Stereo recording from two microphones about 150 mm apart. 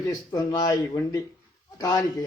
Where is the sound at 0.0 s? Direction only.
25° left (ahead or behind).